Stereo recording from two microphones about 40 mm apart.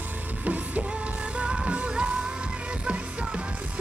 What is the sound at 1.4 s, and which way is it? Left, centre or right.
Music, right.